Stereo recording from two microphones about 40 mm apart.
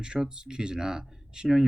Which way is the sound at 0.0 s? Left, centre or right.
Centre.